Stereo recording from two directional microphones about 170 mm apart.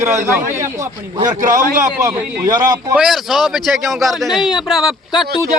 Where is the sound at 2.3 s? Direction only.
20° right (ahead or behind).